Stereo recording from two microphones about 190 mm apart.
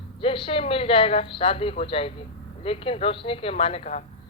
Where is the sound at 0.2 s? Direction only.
30° left (ahead or behind).